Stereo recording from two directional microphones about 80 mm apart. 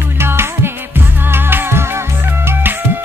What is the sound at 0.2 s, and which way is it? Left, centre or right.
Music, right.